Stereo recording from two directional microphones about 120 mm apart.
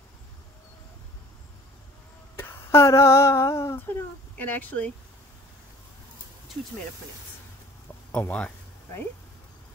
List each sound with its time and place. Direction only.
2.4 s speech: 20° left (ahead or behind)
4.4 s speech: 15° left (ahead or behind)
8.1 s speech: 10° left (ahead or behind)